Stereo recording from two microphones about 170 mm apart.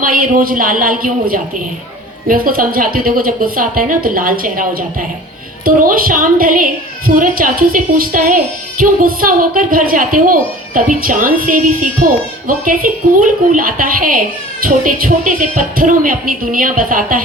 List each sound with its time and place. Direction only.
0.0 s a woman's voice: 55° right (ahead or behind)